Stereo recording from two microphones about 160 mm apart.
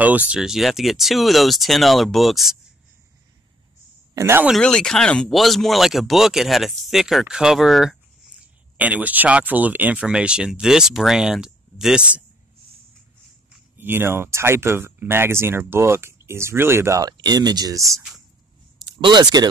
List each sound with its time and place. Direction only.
0.0 s speech: 10° right (ahead or behind)
4.1 s speech: 15° right (ahead or behind)
4.5 s speech: 5° left (ahead or behind)
13.7 s speech: 15° right (ahead or behind)